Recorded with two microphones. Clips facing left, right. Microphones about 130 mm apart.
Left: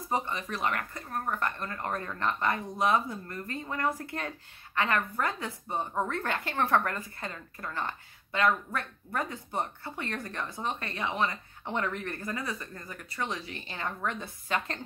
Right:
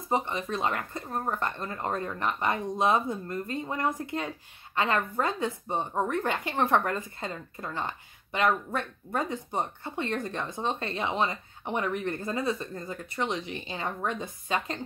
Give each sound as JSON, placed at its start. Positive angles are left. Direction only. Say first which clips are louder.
{"t": 0.1, "sound": "a woman's voice", "louder": "right 3 dB", "side_deg": -25}